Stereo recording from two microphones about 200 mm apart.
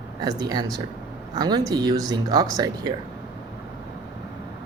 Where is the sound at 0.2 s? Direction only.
20° right (ahead or behind).